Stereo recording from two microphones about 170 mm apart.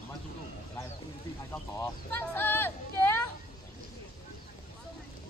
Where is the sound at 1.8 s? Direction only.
10° left (ahead or behind).